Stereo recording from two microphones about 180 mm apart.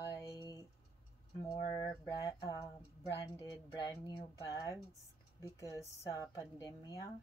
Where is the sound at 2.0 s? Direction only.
20° left (ahead or behind).